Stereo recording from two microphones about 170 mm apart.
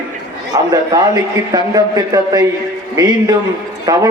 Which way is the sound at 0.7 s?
20° right (ahead or behind).